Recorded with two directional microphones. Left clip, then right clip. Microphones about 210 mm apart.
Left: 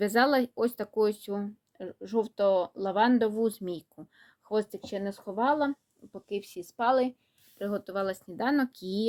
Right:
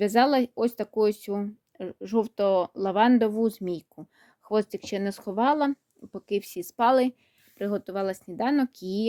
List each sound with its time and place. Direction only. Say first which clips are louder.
0.0 s speech: right 3 dB; 30° right (ahead or behind); by 7.1 s 55° right (ahead or behind)
7.6 s speech: right 3 dB; 40° right (ahead or behind)